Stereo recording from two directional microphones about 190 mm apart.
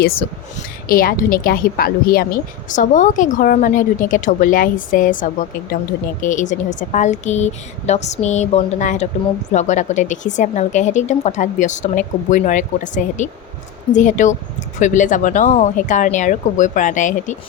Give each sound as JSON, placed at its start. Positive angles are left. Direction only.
{"t": 0.9, "sound": "a woman's voice", "side_deg": 50}